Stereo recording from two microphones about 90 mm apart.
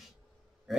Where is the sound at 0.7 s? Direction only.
5° right (ahead or behind).